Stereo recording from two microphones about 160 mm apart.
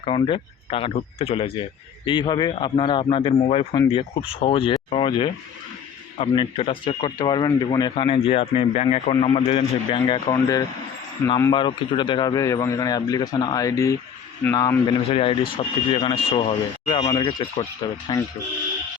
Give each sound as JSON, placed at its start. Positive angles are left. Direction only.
{"t": 0.0, "sound": "speech", "side_deg": 35}
{"t": 10.3, "sound": "a man's voice", "side_deg": 20}
{"t": 11.5, "sound": "a man's voice", "side_deg": 30}
{"t": 15.1, "sound": "a man's voice", "side_deg": 35}